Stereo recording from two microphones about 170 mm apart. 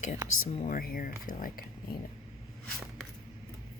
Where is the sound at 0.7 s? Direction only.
55° left (ahead or behind).